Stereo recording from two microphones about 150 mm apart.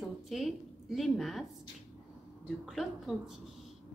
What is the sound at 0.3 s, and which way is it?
A woman's voice, centre (ahead or behind).